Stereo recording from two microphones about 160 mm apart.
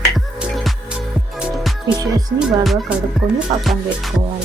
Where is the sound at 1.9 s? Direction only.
25° right (ahead or behind).